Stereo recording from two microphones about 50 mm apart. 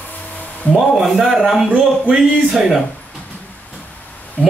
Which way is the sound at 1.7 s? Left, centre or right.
Right.